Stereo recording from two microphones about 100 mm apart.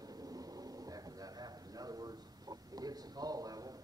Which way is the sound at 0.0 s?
40° right (ahead or behind).